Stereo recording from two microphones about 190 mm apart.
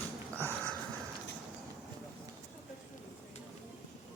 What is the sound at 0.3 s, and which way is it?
Dog, 10° left (ahead or behind).